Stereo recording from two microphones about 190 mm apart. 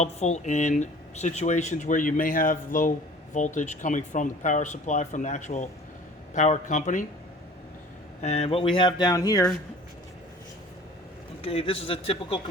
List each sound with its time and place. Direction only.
0.0 s speech: 35° left (ahead or behind)
8.2 s speech: 35° left (ahead or behind); by 9.5 s 20° left (ahead or behind)
11.4 s speech: 30° left (ahead or behind)